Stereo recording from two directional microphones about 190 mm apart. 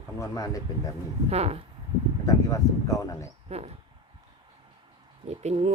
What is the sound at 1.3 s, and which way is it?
Speech, 35° right (ahead or behind).